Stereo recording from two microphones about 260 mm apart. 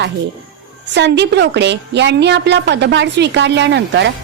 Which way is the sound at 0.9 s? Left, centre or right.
Right.